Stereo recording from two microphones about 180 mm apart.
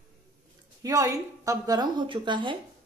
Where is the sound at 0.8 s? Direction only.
20° right (ahead or behind).